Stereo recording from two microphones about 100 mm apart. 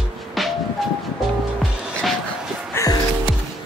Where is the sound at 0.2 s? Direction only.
Centre (ahead or behind).